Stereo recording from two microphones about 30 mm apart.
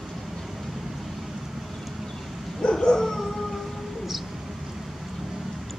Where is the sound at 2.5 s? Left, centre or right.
Left.